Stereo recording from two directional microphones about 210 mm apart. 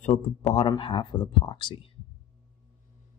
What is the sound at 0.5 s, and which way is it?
Speech, 25° left (ahead or behind).